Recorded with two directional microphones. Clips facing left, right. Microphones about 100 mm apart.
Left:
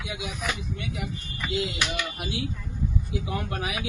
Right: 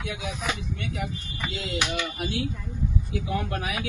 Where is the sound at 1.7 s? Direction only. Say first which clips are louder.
Right 2 dB; 25° right (ahead or behind).